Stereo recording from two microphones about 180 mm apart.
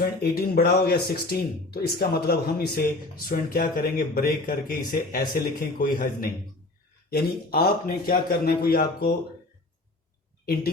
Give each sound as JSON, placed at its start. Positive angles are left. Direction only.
{"t": 0.0, "sound": "speech", "side_deg": 60}